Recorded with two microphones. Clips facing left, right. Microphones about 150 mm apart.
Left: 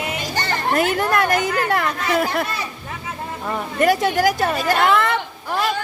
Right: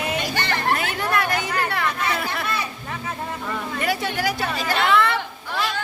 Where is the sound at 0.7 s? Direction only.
45° left (ahead or behind).